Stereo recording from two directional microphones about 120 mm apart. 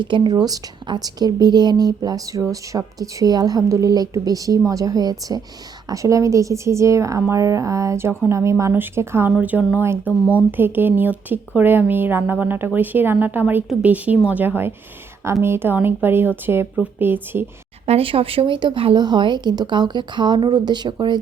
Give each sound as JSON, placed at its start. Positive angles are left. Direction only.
{"t": 0.0, "sound": "speech", "side_deg": -40}
{"t": 17.8, "sound": "speech", "side_deg": -55}